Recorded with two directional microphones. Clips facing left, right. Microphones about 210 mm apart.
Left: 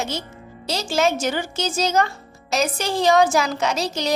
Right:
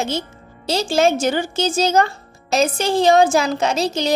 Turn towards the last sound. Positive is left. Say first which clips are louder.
# right 4 dB
turn(degrees=-25)  # may be behind; listen again after turning